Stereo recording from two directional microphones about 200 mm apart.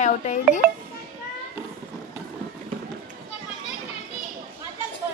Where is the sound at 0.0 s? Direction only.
35° left (ahead or behind).